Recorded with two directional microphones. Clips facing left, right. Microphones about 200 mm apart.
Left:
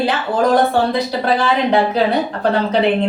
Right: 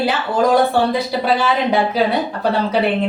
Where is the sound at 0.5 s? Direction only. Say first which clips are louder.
Even; 10° right (ahead or behind).